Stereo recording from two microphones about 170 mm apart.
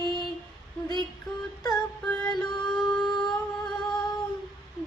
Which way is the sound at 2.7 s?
Centre (ahead or behind).